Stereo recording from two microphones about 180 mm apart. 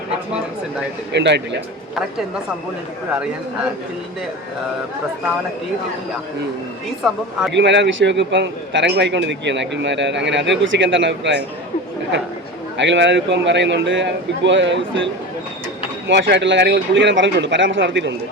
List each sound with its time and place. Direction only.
1.1 s speech: 75° right (ahead or behind)
7.0 s speech: centre (ahead or behind)
7.5 s a man's voice: 80° right
12.7 s a man's voice: 80° right